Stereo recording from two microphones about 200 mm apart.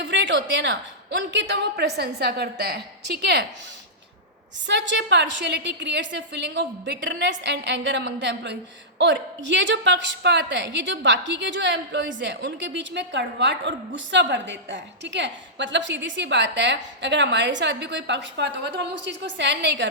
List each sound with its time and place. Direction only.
0.0 s a woman's voice: 60° right (ahead or behind)
4.6 s a woman's voice: 60° right (ahead or behind)